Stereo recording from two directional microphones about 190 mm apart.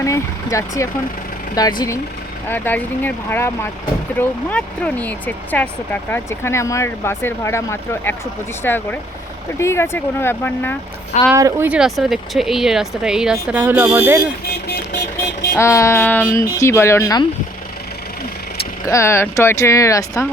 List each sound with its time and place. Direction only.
0.0 s speech: 15° left (ahead or behind)
11.3 s speech: 15° right (ahead or behind)
15.5 s speech: 15° left (ahead or behind)
18.9 s speech: 15° left (ahead or behind)